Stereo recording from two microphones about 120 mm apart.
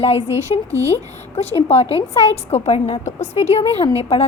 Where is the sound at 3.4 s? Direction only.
65° left (ahead or behind).